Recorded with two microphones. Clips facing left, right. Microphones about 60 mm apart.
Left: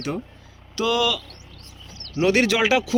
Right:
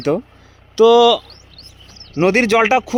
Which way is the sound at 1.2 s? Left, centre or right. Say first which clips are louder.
Even; right.